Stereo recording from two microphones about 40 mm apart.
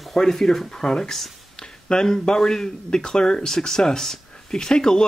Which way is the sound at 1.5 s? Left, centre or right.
Centre.